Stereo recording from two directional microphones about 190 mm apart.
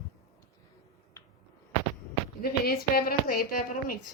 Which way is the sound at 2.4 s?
50° left (ahead or behind).